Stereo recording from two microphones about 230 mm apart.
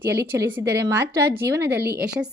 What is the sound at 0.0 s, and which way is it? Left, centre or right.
A woman's voice, centre.